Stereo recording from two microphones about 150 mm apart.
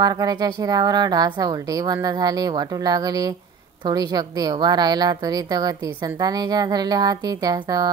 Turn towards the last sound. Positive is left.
turn(degrees=-25)  # may be behind; listen again after turning